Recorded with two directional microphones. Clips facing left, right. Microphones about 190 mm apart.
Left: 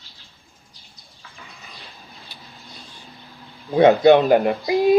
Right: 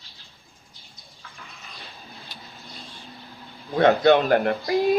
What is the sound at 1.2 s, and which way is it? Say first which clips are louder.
Bird: left 1 dB; centre (ahead or behind).